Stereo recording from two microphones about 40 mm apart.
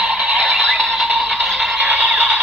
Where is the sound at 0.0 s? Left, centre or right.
Right.